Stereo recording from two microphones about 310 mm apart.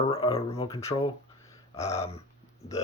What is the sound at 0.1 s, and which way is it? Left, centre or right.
Speech, centre.